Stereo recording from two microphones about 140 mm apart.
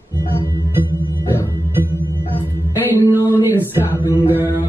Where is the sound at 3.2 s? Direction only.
20° left (ahead or behind).